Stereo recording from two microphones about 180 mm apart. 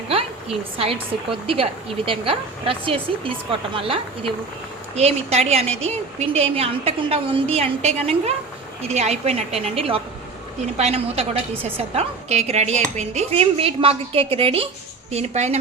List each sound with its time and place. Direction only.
0.1 s a woman's voice: 30° right (ahead or behind)